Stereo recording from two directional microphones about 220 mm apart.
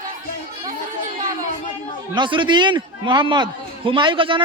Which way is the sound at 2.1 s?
20° right (ahead or behind).